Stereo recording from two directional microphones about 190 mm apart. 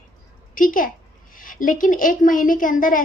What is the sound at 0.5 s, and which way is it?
A woman's voice, 45° left (ahead or behind).